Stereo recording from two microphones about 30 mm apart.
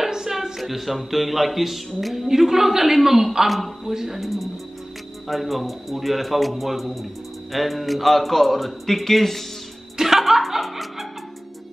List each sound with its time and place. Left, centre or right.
0.3 s a man's voice: centre
2.2 s a woman's voice: centre
3.9 s a woman's voice: centre
4.2 s a man's voice: centre
9.9 s music: centre